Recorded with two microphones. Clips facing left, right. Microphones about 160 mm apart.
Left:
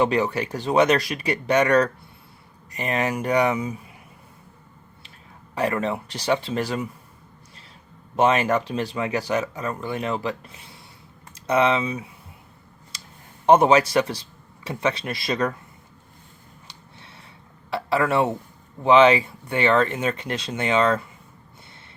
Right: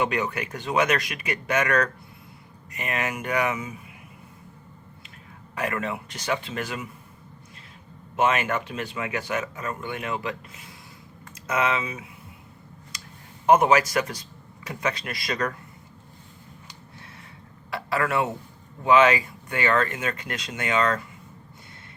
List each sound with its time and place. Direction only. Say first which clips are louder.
0.0 s speech: left 5 dB; 30° left (ahead or behind)
5.5 s speech: left 5 dB; 30° left (ahead or behind)
8.1 s speech: left 4 dB; 35° left (ahead or behind)
13.5 s speech: left 3 dB; 30° left (ahead or behind)
17.7 s speech: left 4 dB; 30° left (ahead or behind)